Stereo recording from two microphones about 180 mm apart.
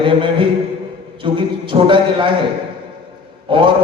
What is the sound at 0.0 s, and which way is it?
A man's voice, 30° right (ahead or behind).